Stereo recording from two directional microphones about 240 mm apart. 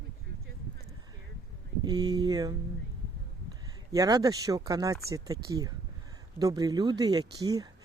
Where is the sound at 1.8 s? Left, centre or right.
Centre.